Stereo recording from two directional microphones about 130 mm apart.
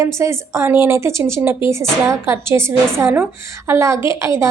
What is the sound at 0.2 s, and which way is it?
Speech, 20° right (ahead or behind).